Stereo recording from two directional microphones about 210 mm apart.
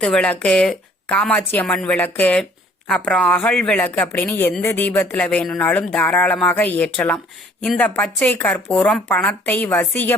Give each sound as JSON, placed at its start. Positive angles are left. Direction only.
{"t": 0.0, "sound": "a woman's voice", "side_deg": 5}